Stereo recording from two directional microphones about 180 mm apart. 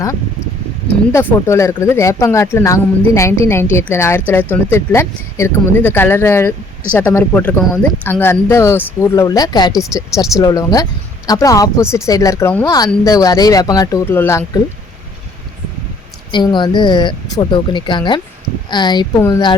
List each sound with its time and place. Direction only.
1.1 s speech: 15° left (ahead or behind)
16.3 s speech: 25° left (ahead or behind)